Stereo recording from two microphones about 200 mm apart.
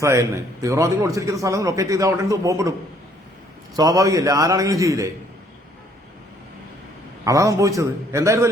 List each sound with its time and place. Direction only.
0.0 s a man's voice: 15° right (ahead or behind)
3.8 s a man's voice: 15° right (ahead or behind)
7.3 s a man's voice: 15° right (ahead or behind)